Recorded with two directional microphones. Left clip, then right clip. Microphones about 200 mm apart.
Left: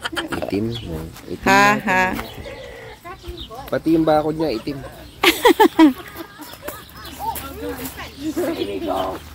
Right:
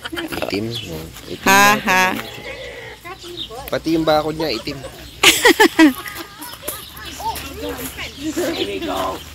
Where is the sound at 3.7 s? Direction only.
45° left (ahead or behind).